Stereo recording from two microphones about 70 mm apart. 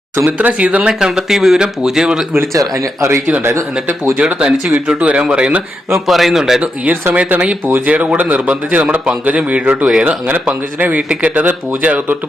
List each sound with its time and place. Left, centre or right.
0.3 s speech: right
2.5 s speech: right
4.2 s speech: centre
6.1 s a man's voice: centre
6.6 s speech: right
10.0 s speech: right